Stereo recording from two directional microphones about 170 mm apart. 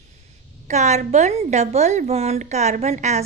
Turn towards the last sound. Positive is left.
turn(degrees=-40)  # may be behind; listen again after turning